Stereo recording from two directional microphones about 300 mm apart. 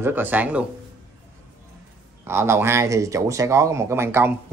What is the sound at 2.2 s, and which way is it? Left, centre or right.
Speech, centre.